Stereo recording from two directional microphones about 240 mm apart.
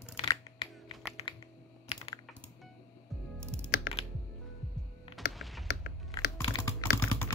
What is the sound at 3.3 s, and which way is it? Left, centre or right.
Typing, centre.